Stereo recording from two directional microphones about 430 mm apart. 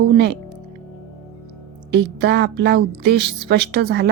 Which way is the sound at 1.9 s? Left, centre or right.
Right.